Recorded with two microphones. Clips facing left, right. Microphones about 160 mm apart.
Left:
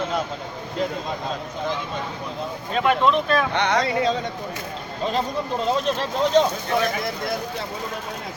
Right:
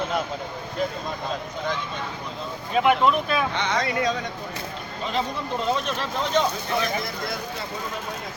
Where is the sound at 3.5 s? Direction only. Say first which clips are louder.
Left 4 dB; 65° left (ahead or behind).